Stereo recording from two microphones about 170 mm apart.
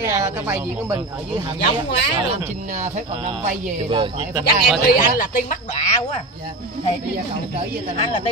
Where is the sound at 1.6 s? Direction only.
85° left.